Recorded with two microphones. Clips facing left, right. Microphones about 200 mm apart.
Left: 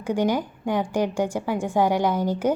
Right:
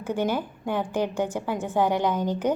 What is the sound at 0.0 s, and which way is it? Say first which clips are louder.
A woman's voice: left 3 dB; 15° left (ahead or behind).